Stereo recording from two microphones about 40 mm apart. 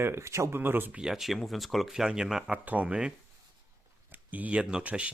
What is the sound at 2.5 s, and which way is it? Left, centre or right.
Speech, right.